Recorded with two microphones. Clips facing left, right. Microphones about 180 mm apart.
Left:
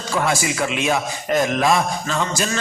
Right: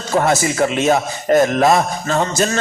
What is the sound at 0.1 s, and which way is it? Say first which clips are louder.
A man's voice: right 5 dB; 40° right (ahead or behind).